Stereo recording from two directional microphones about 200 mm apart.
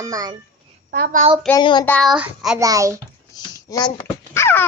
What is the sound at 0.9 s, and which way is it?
Speech, 45° right (ahead or behind).